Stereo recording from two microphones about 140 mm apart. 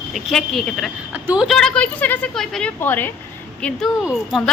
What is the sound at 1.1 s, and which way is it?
Speech, 10° right (ahead or behind).